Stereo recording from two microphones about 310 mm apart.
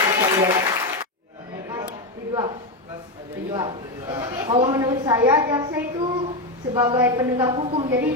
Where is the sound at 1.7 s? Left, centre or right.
Centre.